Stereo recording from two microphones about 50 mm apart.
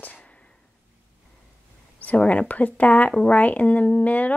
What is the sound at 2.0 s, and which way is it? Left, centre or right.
Speech, left.